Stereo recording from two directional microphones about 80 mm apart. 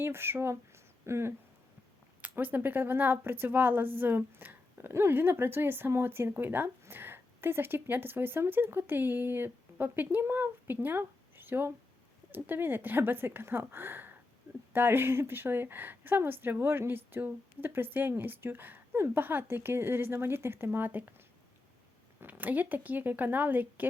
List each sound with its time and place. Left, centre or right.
0.0 s speech: right
2.2 s a woman's voice: right
22.2 s a woman's voice: right